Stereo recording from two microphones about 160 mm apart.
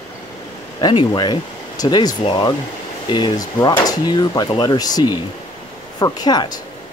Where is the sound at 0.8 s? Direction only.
30° left (ahead or behind).